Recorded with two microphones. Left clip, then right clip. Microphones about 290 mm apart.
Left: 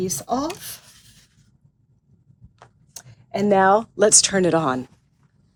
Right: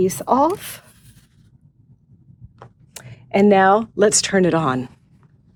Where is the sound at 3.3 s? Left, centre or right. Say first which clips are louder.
Right 3 dB; right.